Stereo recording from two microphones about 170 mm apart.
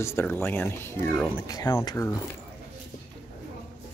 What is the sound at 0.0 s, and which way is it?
Speech, 10° left (ahead or behind).